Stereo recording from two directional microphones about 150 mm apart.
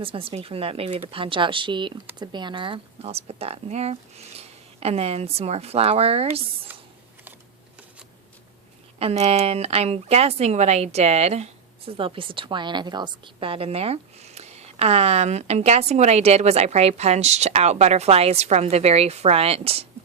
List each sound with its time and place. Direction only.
0.0 s a woman's voice: 35° right (ahead or behind)
9.0 s a woman's voice: 45° right (ahead or behind)